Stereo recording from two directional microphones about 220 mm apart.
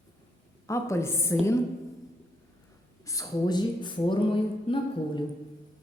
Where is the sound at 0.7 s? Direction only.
15° left (ahead or behind).